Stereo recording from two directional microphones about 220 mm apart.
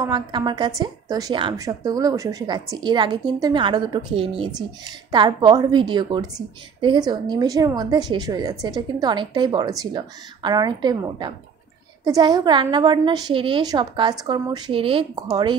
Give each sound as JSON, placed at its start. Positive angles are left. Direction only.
{"t": 0.0, "sound": "a woman's voice", "side_deg": -20}